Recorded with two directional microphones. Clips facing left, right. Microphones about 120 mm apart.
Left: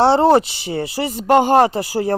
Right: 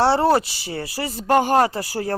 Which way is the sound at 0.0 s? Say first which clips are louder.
Left 4 dB; 20° left (ahead or behind).